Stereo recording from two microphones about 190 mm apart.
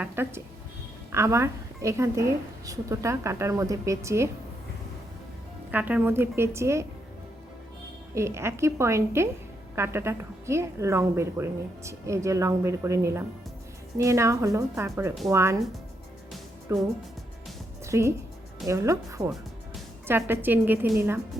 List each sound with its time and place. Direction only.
0.0 s a woman's voice: 10° right (ahead or behind)
5.7 s a woman's voice: 10° right (ahead or behind)
8.1 s a woman's voice: 15° right (ahead or behind)
16.7 s a woman's voice: 15° right (ahead or behind)